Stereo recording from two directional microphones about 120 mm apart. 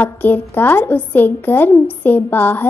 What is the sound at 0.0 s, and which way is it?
A woman's voice, 15° left (ahead or behind).